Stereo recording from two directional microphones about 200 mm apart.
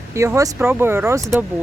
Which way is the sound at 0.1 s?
15° right (ahead or behind).